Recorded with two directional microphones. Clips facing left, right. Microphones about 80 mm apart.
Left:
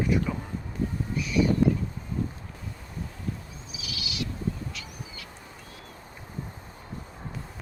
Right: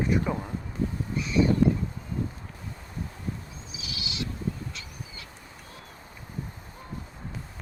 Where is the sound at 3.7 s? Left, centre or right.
Right.